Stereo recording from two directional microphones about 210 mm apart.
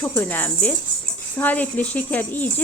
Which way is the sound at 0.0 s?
10° left (ahead or behind).